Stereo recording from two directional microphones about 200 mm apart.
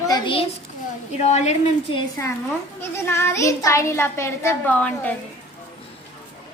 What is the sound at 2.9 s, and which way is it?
A child's voice, 15° left (ahead or behind).